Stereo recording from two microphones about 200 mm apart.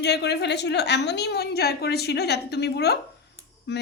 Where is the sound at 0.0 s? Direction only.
55° left (ahead or behind).